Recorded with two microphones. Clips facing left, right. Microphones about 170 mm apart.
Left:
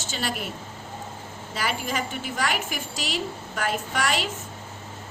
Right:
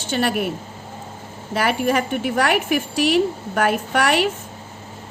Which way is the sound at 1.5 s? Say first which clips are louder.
Right 9 dB; 60° right (ahead or behind).